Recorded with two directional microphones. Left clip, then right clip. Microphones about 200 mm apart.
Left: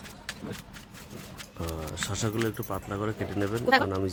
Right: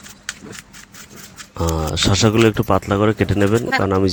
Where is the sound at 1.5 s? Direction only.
40° right (ahead or behind).